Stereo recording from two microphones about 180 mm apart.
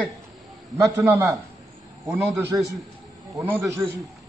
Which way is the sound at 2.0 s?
Centre (ahead or behind).